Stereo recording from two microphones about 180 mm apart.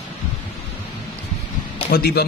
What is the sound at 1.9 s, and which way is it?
Speech, 60° left (ahead or behind).